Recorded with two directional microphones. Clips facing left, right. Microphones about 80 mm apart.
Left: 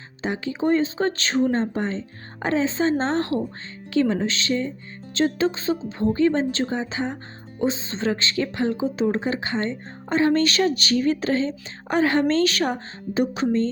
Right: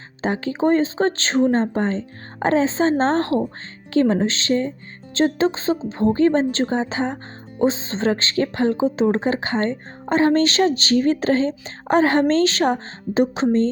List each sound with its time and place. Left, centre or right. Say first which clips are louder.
0.2 s speech: right 4 dB; right